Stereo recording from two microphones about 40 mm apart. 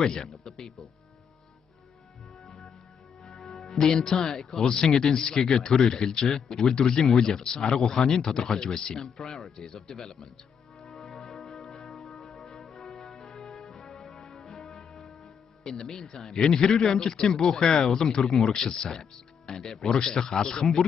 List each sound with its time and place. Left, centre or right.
0.0 s speech: centre
3.3 s music: centre
3.7 s speech: centre
10.9 s music: centre
15.7 s speech: centre
16.0 s speech: centre